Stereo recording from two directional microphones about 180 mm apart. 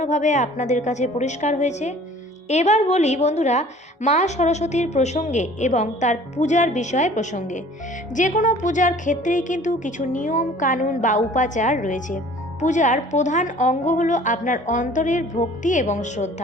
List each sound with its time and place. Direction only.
0.0 s a woman's voice: 40° left (ahead or behind)